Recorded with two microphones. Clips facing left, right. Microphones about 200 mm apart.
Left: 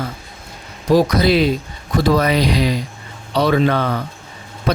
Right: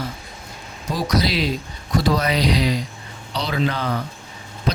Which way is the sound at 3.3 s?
55° left (ahead or behind).